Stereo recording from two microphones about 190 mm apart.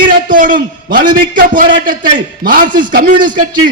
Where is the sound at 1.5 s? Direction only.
45° right (ahead or behind).